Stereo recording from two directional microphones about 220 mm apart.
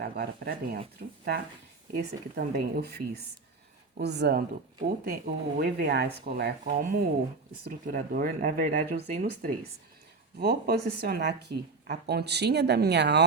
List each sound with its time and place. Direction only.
0.0 s speech: 45° right (ahead or behind)
3.9 s speech: 50° right (ahead or behind)